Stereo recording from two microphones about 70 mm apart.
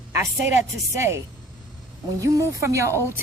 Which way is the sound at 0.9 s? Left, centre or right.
Right.